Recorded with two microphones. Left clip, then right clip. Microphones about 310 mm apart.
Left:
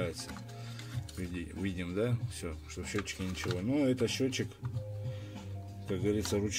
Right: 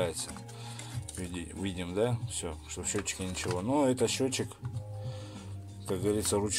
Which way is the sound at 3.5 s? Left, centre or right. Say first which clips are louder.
Right 3 dB; right.